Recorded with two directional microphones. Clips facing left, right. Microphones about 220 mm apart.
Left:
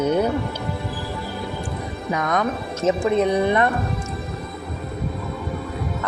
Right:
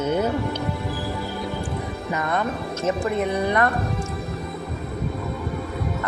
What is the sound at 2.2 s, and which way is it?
Speech, 90° left.